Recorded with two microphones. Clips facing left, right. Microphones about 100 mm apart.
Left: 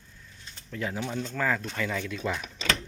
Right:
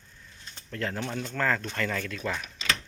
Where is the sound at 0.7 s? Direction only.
10° left (ahead or behind).